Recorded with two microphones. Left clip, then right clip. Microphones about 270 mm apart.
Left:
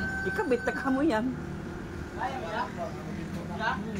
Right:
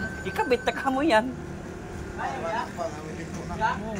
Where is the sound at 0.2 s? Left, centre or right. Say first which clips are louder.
Right 4 dB; centre.